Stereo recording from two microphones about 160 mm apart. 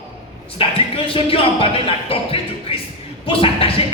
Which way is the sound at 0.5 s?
35° left (ahead or behind).